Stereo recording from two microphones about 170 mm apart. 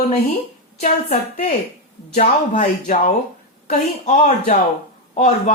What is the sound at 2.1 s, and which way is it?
A woman's voice, 50° left (ahead or behind).